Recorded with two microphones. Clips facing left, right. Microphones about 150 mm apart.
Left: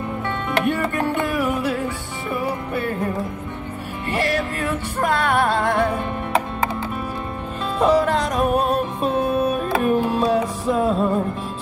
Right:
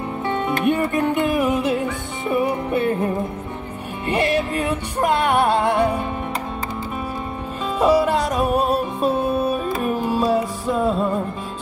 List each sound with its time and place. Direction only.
0.7 s music: 20° right (ahead or behind)
4.1 s music: 20° right (ahead or behind)
7.8 s music: 10° right (ahead or behind)